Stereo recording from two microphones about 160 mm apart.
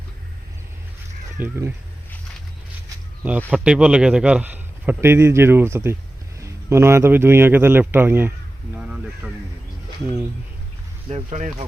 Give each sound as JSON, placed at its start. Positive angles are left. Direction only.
{"t": 1.4, "sound": "a man's voice", "side_deg": -15}
{"t": 3.2, "sound": "a man's voice", "side_deg": -10}
{"t": 11.1, "sound": "speech", "side_deg": -50}